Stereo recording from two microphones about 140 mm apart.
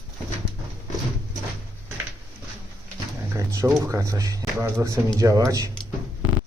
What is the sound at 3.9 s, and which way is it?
Speech, 25° right (ahead or behind).